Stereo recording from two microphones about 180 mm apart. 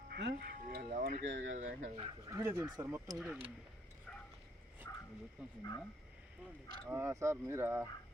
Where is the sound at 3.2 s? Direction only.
5° right (ahead or behind).